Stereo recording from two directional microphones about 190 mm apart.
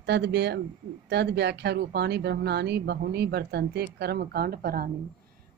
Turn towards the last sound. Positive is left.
turn(degrees=-55)  # may be behind; listen again after turning